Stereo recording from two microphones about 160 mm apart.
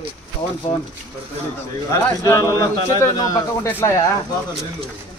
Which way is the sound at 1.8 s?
20° left (ahead or behind).